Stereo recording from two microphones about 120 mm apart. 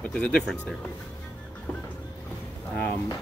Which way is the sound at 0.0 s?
10° left (ahead or behind).